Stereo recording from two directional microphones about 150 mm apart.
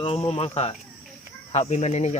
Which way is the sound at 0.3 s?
45° left (ahead or behind).